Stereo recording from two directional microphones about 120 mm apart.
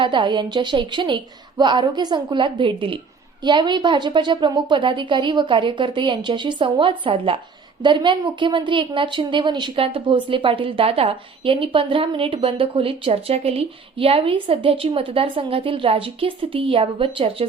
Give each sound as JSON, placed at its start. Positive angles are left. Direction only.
{"t": 0.0, "sound": "a woman's voice", "side_deg": -40}